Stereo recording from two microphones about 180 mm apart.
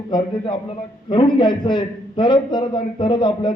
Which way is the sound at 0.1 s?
25° left (ahead or behind).